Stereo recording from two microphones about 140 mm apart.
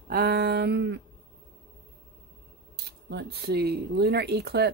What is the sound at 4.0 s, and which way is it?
Speech, 90° right.